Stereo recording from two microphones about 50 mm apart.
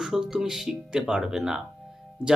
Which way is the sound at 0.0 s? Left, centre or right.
Centre.